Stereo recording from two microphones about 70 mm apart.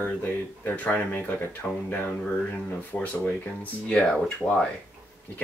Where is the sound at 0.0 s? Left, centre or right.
Left.